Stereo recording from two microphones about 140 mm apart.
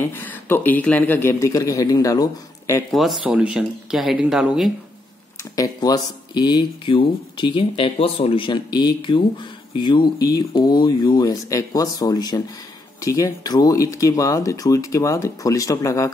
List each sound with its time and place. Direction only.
0.0 s speech: 15° left (ahead or behind)
2.9 s speech: centre (ahead or behind)
5.6 s speech: 30° left (ahead or behind)